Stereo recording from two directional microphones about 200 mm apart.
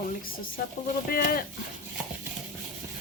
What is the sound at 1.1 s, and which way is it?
Speech, 45° left (ahead or behind).